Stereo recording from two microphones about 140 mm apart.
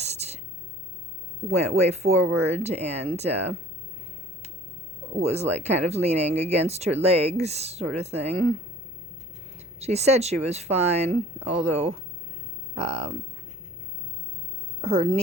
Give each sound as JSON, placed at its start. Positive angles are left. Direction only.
{"t": 0.0, "sound": "a sound", "side_deg": -50}
{"t": 1.5, "sound": "speech", "side_deg": -50}
{"t": 5.2, "sound": "speech", "side_deg": -50}
{"t": 9.8, "sound": "speech", "side_deg": -50}
{"t": 14.8, "sound": "a woman's voice", "side_deg": -40}